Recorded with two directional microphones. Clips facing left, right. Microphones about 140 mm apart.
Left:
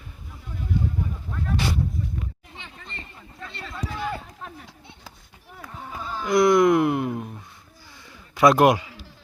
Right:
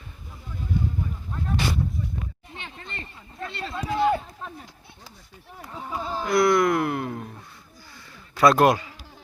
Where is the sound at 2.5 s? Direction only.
65° right (ahead or behind).